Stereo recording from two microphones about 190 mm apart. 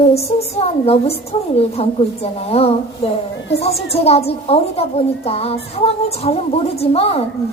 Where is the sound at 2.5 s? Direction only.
30° left (ahead or behind).